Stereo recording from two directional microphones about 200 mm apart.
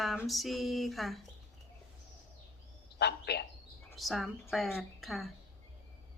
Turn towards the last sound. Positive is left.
turn(degrees=0)  # may be behind; listen again after turning